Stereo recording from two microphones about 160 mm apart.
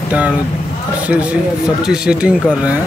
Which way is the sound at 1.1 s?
10° right (ahead or behind).